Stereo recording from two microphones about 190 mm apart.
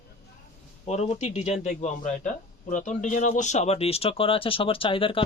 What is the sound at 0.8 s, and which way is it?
Speech, 35° left (ahead or behind).